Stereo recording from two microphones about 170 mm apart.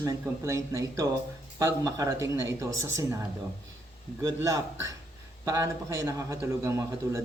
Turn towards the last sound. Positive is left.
turn(degrees=-15)  # may be behind; listen again after turning